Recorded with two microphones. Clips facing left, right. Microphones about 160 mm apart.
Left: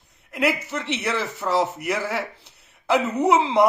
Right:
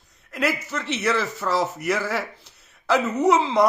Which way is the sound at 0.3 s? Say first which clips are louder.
Left 2 dB; 20° left (ahead or behind).